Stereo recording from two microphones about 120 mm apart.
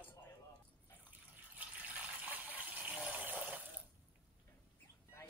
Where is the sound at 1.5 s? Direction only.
15° right (ahead or behind).